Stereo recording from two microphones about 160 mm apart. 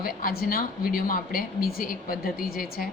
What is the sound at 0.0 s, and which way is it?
Speech, 65° left (ahead or behind).